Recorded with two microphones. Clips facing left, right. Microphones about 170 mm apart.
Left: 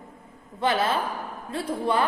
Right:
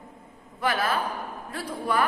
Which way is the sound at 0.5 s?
25° left (ahead or behind).